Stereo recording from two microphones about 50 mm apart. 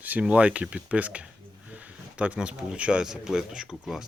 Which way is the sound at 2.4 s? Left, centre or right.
Centre.